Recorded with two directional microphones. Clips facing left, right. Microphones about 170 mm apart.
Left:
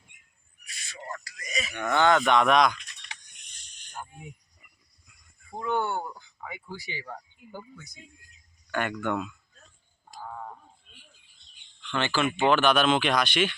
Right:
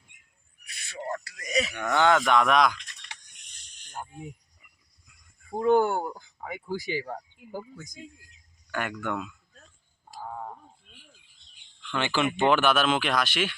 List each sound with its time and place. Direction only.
0.6 s owl: 60° right (ahead or behind)
1.5 s cattle: 65° right (ahead or behind)
1.7 s speech: 10° right (ahead or behind)
5.5 s speech: 40° right (ahead or behind)
8.7 s speech: 5° right (ahead or behind)
10.1 s a sound: 10° right (ahead or behind)
11.8 s speech: 10° right (ahead or behind)